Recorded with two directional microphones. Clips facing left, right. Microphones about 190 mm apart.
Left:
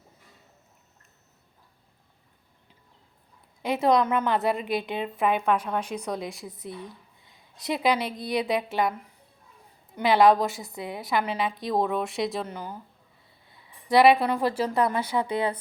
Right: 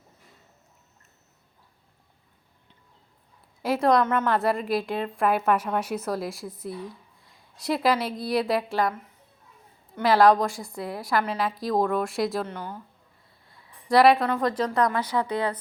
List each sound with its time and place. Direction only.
3.6 s a woman's voice: centre (ahead or behind)
10.0 s a woman's voice: centre (ahead or behind)
12.5 s speech: 10° left (ahead or behind)
13.6 s a sound: centre (ahead or behind)
14.3 s speech: 10° left (ahead or behind)
14.8 s speech: 25° left (ahead or behind)